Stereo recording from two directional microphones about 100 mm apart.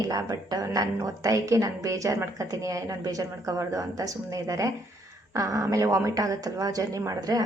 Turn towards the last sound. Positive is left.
turn(degrees=-40)  # may be behind; listen again after turning